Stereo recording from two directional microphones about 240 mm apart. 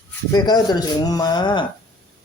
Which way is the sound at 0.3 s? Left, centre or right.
Centre.